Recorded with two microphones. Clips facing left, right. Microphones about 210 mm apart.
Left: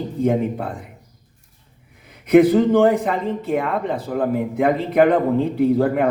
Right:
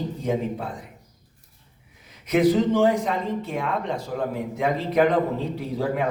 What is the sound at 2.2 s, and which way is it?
A man's voice, 55° left (ahead or behind).